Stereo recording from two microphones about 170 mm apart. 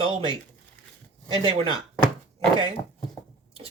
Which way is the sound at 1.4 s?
30° right (ahead or behind).